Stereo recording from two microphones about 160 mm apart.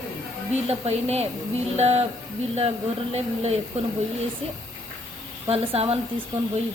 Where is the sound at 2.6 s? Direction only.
40° right (ahead or behind).